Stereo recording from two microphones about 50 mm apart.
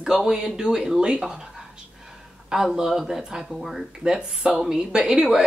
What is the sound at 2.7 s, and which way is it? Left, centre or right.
Speech, centre.